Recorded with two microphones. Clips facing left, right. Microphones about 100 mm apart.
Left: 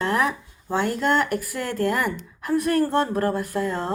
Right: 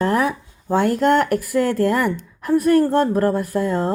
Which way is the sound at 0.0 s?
40° right (ahead or behind).